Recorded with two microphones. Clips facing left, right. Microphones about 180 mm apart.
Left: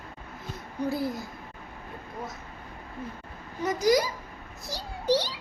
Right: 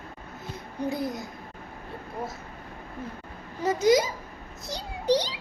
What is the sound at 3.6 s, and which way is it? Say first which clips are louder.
A child's voice: right 2 dB; 25° right (ahead or behind).